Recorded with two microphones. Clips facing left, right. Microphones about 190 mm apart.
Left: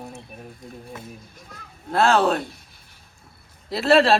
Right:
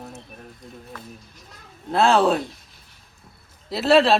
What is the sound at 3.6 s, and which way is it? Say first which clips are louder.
Speech: even; centre (ahead or behind).